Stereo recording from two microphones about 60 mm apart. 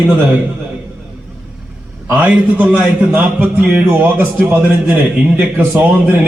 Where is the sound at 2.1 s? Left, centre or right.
Right.